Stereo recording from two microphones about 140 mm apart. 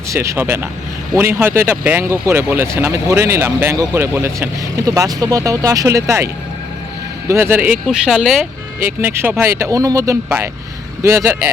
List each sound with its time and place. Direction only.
0.1 s speech: 20° right (ahead or behind)
7.3 s speech: 15° right (ahead or behind)
9.0 s speech: 15° right (ahead or behind)